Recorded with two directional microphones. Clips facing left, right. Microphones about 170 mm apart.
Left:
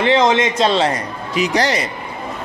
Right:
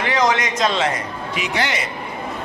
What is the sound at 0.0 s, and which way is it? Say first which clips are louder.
A man's voice: left 5 dB; 25° left (ahead or behind).